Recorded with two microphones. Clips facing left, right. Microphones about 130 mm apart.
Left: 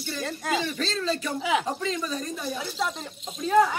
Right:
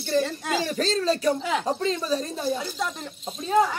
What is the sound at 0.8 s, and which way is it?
Speech, 40° right (ahead or behind).